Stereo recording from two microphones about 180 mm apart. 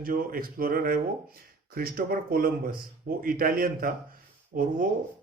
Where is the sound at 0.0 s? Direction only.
50° right (ahead or behind).